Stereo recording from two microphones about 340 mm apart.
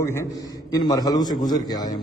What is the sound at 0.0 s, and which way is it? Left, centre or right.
A man's voice, centre.